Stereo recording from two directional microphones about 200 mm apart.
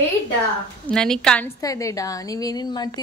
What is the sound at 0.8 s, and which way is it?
Speech, 5° left (ahead or behind).